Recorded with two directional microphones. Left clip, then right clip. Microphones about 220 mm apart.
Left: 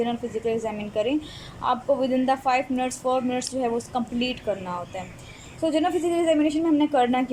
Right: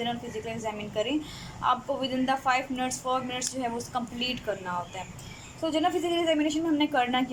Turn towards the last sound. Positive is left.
turn(degrees=15)  # may be behind; listen again after turning